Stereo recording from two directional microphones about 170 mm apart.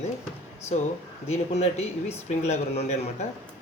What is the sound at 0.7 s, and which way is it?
Speech, 40° left (ahead or behind).